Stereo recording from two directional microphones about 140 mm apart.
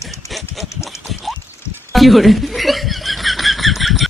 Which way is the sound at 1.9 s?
Centre (ahead or behind).